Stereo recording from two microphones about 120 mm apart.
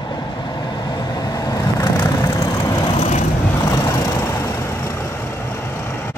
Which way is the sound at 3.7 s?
25° left (ahead or behind).